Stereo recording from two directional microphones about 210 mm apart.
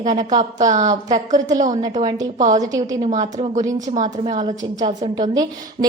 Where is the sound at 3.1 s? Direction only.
25° right (ahead or behind).